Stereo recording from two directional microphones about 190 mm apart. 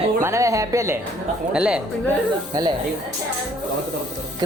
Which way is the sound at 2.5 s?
20° right (ahead or behind).